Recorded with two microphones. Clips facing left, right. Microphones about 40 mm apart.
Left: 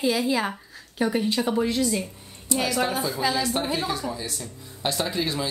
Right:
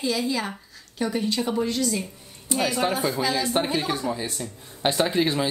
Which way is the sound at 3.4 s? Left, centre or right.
Right.